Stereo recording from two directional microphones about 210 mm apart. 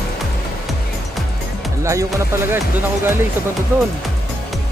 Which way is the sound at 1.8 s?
15° right (ahead or behind).